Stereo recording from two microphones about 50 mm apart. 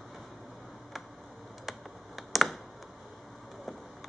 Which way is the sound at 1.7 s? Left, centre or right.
Centre.